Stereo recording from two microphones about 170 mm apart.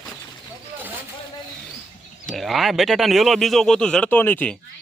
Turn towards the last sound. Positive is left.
turn(degrees=10)  # may be behind; listen again after turning